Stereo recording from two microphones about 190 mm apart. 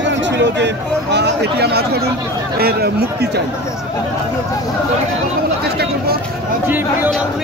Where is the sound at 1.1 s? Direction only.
60° right (ahead or behind).